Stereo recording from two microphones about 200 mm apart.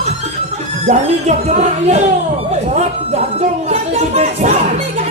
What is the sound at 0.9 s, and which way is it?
Speech, 35° right (ahead or behind).